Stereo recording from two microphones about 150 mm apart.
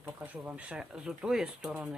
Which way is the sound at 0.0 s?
15° right (ahead or behind).